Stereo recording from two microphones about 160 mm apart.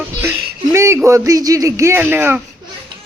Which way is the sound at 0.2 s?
15° right (ahead or behind).